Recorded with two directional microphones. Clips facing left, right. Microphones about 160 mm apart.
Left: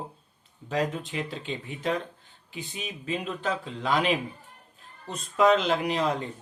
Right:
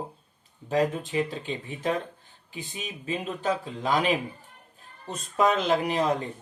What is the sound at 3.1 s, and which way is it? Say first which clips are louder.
A man's voice: right 2 dB; 40° right (ahead or behind).